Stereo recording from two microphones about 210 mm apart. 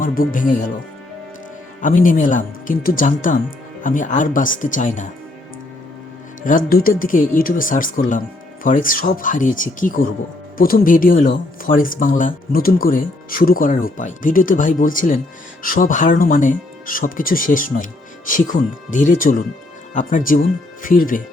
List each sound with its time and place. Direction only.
0.0 s speech: 40° left (ahead or behind)
1.8 s speech: 40° left (ahead or behind)
6.7 s speech: 45° left (ahead or behind)